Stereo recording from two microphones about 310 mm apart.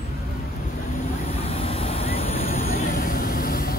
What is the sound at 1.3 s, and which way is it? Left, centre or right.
Vehicle, centre.